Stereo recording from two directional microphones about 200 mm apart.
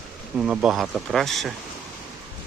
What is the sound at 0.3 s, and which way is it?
Speech, 5° right (ahead or behind).